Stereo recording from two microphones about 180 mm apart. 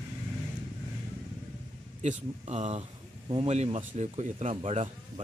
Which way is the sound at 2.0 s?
40° right (ahead or behind).